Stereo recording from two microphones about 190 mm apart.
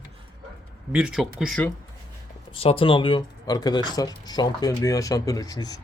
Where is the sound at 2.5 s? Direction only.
30° left (ahead or behind).